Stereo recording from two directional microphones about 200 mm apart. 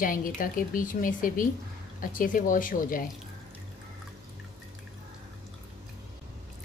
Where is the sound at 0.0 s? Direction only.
45° left (ahead or behind).